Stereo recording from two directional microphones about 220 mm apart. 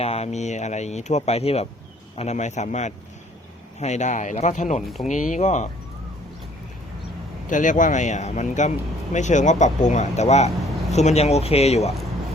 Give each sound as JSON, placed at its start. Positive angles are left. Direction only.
{"t": 0.0, "sound": "speech", "side_deg": 30}
{"t": 7.5, "sound": "speech", "side_deg": 35}